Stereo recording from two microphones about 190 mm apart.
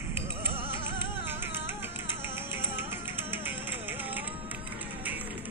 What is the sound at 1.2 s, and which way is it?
Flamenco, 10° right (ahead or behind).